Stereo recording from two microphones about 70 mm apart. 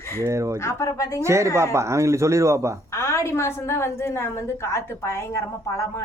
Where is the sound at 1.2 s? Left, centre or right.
Right.